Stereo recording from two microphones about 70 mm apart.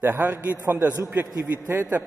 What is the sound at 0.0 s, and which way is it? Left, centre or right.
A man's voice, right.